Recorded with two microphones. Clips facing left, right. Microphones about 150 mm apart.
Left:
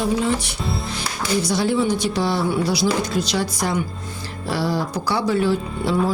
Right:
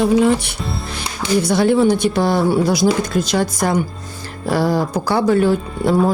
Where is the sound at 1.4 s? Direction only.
55° right (ahead or behind).